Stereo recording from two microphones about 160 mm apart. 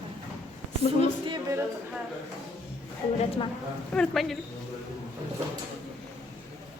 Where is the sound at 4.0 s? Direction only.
Centre (ahead or behind).